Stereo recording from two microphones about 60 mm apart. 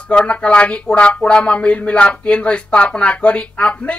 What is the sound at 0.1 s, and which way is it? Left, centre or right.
Speech, centre.